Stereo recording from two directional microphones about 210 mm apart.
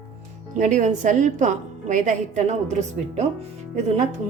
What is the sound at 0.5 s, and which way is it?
A woman's voice, 35° right (ahead or behind).